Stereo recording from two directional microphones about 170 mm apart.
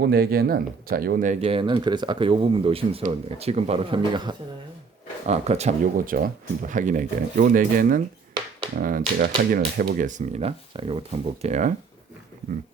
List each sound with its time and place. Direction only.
0.0 s speech: 65° right (ahead or behind); by 4.4 s 25° right (ahead or behind)
5.2 s speech: 40° right (ahead or behind)